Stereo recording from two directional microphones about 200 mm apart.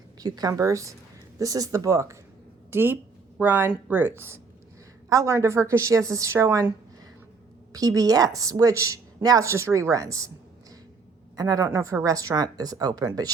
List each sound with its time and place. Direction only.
0.2 s a woman's voice: 20° right (ahead or behind)
7.7 s a woman's voice: 15° right (ahead or behind)
11.3 s a woman's voice: 20° right (ahead or behind)